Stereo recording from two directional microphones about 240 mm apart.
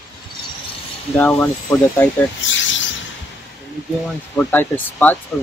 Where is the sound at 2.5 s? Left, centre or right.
Left.